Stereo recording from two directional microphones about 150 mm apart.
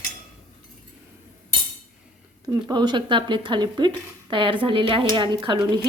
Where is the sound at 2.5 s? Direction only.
30° right (ahead or behind).